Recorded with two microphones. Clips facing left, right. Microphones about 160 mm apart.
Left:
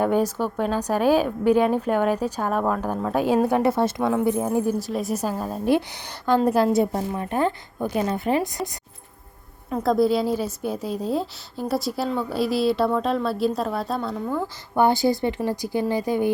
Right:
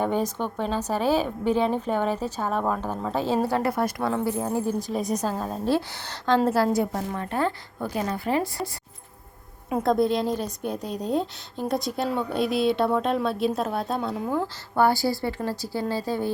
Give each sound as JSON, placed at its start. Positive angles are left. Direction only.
{"t": 0.0, "sound": "a woman's voice", "side_deg": 10}
{"t": 3.5, "sound": "a woman's voice", "side_deg": 25}
{"t": 4.8, "sound": "a woman's voice", "side_deg": 0}
{"t": 9.8, "sound": "a woman's voice", "side_deg": 0}
{"t": 14.4, "sound": "a woman's voice", "side_deg": 20}